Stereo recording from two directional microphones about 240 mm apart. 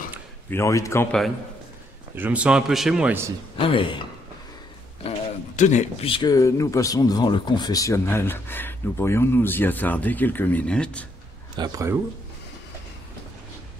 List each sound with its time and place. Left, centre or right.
0.5 s speech: centre
2.1 s a man's voice: centre
3.5 s speech: left
5.0 s speech: left; by 11.1 s centre
11.5 s speech: centre